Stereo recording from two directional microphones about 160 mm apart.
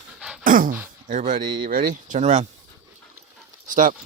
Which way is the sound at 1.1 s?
50° right (ahead or behind).